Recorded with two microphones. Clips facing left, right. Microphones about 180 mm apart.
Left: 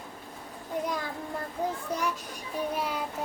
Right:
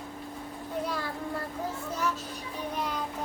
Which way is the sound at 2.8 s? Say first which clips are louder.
Left 1 dB; 10° left (ahead or behind).